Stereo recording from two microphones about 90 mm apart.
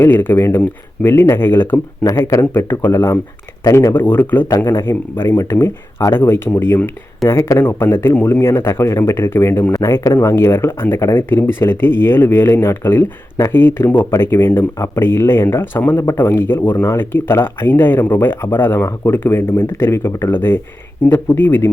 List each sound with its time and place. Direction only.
0.0 s speech: 20° left (ahead or behind)
4.0 s speech: 20° left (ahead or behind)
16.7 s speech: 35° left (ahead or behind)
17.0 s speech: 25° left (ahead or behind)